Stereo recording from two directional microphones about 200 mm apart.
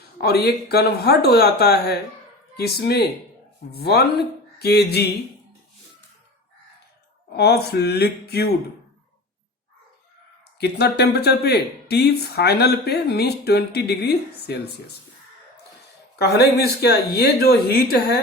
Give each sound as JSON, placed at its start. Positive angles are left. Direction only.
{"t": 0.2, "sound": "speech", "side_deg": 55}
{"t": 7.3, "sound": "speech", "side_deg": 55}
{"t": 10.6, "sound": "speech", "side_deg": 55}
{"t": 16.1, "sound": "speech", "side_deg": 55}